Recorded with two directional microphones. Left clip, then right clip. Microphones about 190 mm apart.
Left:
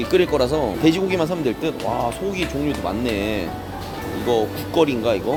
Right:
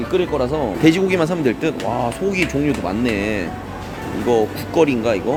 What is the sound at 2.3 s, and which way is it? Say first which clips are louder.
Speech: right 4 dB; 20° right (ahead or behind).